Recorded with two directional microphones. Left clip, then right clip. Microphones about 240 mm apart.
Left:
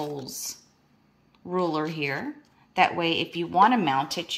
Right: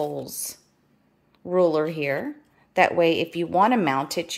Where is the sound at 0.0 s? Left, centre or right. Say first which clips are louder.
Right 4 dB; centre.